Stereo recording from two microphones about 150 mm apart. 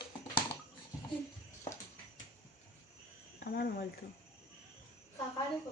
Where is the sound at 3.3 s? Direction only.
90° left.